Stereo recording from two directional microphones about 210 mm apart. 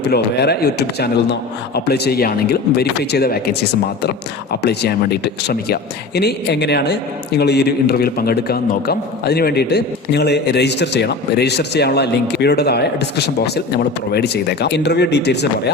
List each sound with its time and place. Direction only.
0.1 s a man's voice: 50° left (ahead or behind)
4.6 s a man's voice: 50° left (ahead or behind)